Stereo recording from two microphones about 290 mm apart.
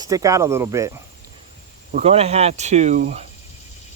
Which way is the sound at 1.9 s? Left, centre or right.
Right.